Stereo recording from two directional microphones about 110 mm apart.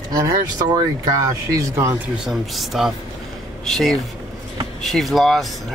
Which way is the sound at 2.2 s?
Centre (ahead or behind).